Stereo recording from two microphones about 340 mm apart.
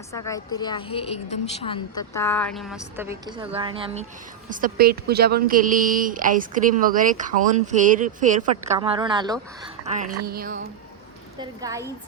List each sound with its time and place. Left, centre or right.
0.1 s a woman's voice: centre; by 10.7 s right
11.3 s a woman's voice: centre